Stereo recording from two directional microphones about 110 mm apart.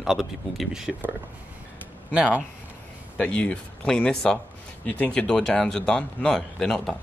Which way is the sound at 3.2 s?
10° left (ahead or behind).